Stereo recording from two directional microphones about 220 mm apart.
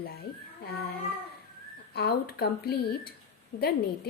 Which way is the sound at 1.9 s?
45° left (ahead or behind).